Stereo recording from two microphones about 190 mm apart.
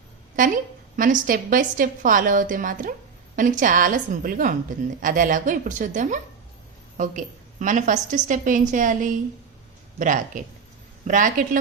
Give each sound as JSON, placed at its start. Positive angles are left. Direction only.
{"t": 0.3, "sound": "a woman's voice", "side_deg": -45}